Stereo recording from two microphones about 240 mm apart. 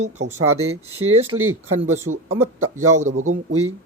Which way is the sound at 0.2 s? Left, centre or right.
Right.